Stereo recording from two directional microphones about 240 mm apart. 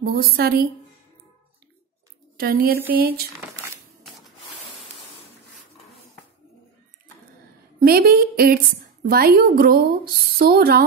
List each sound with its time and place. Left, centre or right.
0.0 s a woman's voice: right
2.3 s a woman's voice: right
7.8 s a woman's voice: right